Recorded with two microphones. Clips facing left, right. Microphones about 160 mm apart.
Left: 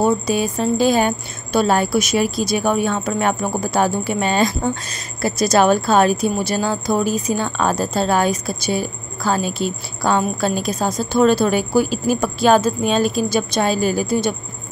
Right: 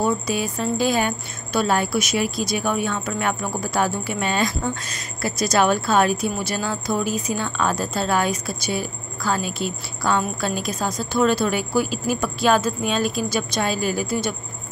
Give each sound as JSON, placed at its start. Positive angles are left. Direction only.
{"t": 0.0, "sound": "speech", "side_deg": 30}